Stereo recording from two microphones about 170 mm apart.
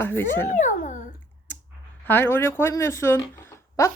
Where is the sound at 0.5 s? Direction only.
50° left (ahead or behind).